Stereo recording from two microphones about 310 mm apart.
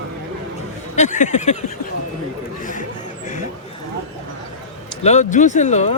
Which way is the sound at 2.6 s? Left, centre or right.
Left.